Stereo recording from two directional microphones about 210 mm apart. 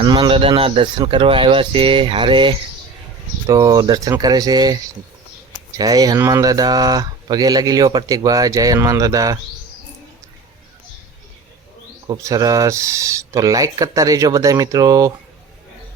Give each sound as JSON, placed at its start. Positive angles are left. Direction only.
{"t": 0.0, "sound": "speech", "side_deg": -25}
{"t": 12.0, "sound": "speech", "side_deg": -15}